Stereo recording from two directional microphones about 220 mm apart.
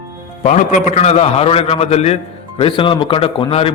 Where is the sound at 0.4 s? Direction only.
35° left (ahead or behind).